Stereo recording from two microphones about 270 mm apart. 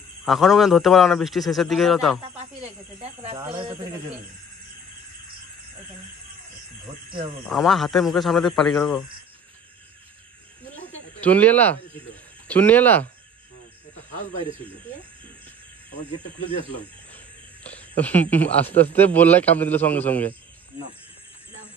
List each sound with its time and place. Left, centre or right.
0.2 s a man's voice: centre
3.3 s speech: centre
7.4 s a man's voice: centre
11.1 s a man's voice: centre
16.4 s speech: centre
17.6 s a man's voice: centre